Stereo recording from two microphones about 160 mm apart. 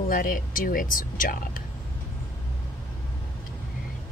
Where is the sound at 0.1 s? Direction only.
60° left (ahead or behind).